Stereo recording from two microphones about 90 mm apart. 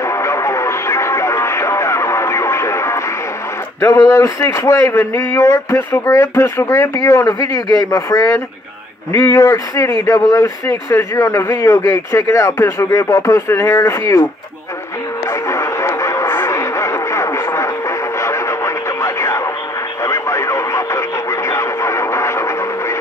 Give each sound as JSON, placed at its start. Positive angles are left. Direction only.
{"t": 0.0, "sound": "music", "side_deg": 30}
{"t": 3.8, "sound": "speech", "side_deg": 35}
{"t": 5.8, "sound": "speech", "side_deg": 20}
{"t": 6.0, "sound": "speech", "side_deg": 35}
{"t": 9.1, "sound": "speech", "side_deg": 30}
{"t": 15.2, "sound": "music", "side_deg": 30}
{"t": 20.0, "sound": "radio", "side_deg": 30}